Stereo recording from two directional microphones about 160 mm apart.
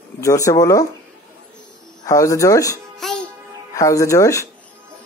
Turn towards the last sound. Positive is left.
turn(degrees=20)  # may be behind; listen again after turning